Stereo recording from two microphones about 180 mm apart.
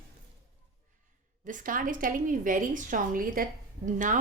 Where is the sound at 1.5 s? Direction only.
45° right (ahead or behind).